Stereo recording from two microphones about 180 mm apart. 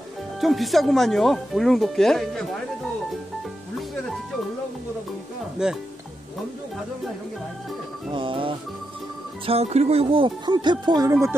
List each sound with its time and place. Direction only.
0.4 s speech: centre (ahead or behind)
5.6 s speech: 5° right (ahead or behind)
8.1 s speech: 30° right (ahead or behind)